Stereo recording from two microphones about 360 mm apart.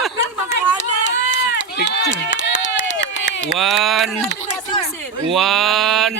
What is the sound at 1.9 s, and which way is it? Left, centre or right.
Run, left.